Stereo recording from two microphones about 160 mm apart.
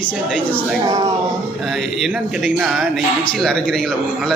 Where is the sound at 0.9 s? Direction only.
20° right (ahead or behind).